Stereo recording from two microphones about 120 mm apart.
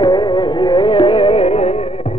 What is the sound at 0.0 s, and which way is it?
Music, 40° left (ahead or behind).